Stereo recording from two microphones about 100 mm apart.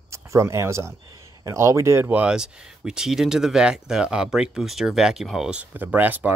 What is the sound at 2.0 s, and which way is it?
Speech, 10° right (ahead or behind).